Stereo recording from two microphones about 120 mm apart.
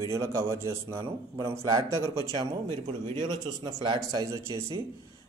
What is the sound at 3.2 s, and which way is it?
A man's voice, 35° right (ahead or behind).